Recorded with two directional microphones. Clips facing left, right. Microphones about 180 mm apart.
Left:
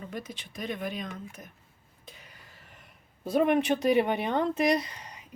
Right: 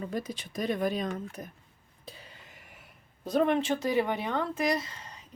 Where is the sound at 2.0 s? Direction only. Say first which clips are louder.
Right 4 dB; 30° right (ahead or behind); by 3.0 s 5° right (ahead or behind).